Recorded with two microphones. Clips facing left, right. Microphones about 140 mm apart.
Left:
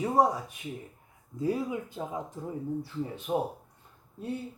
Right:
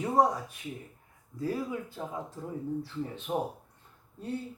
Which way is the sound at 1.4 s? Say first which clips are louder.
Left 3 dB; 20° left (ahead or behind).